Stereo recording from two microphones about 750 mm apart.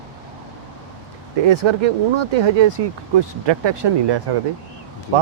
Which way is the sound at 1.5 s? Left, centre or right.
Right.